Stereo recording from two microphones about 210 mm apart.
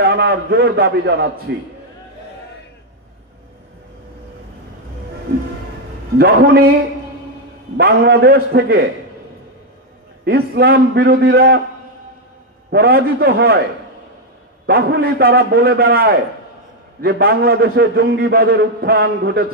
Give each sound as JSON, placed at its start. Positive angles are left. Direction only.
{"t": 0.0, "sound": "a man's voice", "side_deg": -50}
{"t": 6.1, "sound": "a man's voice", "side_deg": -50}
{"t": 7.7, "sound": "a man's voice", "side_deg": -50}
{"t": 10.2, "sound": "a man's voice", "side_deg": -50}
{"t": 12.7, "sound": "a man's voice", "side_deg": -50}
{"t": 14.7, "sound": "a man's voice", "side_deg": -50}